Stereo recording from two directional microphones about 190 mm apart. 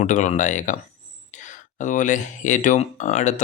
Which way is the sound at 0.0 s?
40° left (ahead or behind).